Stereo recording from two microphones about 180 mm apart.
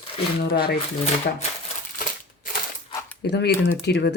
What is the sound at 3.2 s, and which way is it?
Speech, 70° left (ahead or behind).